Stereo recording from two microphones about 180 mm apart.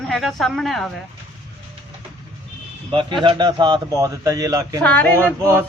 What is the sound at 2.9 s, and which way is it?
A man's voice, 25° right (ahead or behind).